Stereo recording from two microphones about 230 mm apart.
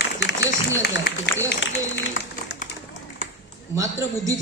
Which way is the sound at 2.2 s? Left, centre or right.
Left.